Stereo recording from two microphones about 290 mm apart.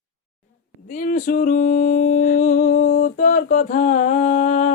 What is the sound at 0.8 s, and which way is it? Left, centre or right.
Music, left.